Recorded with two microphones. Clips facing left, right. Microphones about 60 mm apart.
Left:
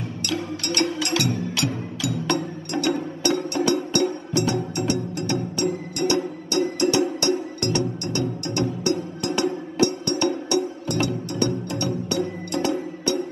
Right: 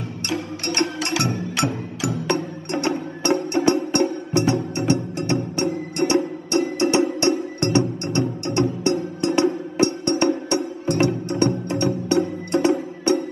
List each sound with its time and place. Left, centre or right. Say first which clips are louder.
0.3 s music: right 1 dB; right